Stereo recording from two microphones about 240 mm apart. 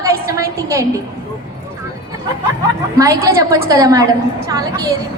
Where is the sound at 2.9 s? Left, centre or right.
Centre.